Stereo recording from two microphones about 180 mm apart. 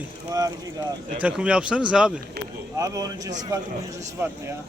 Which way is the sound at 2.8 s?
20° right (ahead or behind).